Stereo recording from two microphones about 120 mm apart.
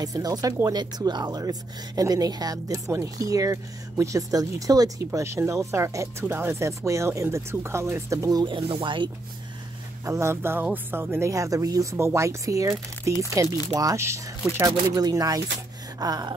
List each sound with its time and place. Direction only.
0.0 s speech: 30° right (ahead or behind)
10.0 s speech: 25° right (ahead or behind)